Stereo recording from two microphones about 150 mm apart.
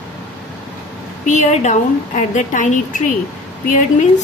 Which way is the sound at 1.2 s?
55° left (ahead or behind).